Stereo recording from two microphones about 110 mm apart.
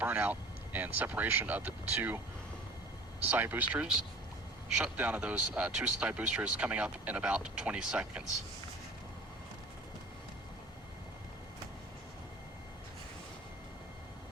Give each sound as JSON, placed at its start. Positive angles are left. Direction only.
{"t": 0.0, "sound": "speech", "side_deg": -15}
{"t": 3.2, "sound": "speech", "side_deg": -20}